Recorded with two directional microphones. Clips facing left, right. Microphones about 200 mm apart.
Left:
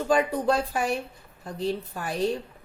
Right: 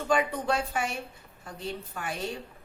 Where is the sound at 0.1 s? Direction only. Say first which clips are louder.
Left 4 dB; 35° left (ahead or behind).